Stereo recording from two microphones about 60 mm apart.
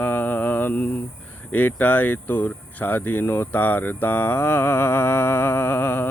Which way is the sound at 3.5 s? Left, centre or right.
Left.